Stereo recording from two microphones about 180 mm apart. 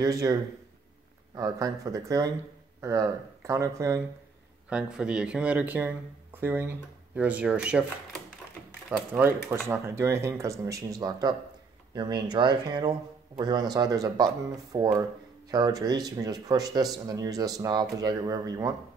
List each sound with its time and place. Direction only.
0.0 s speech: 20° right (ahead or behind)
4.6 s speech: 5° right (ahead or behind); by 18.8 s 20° right (ahead or behind)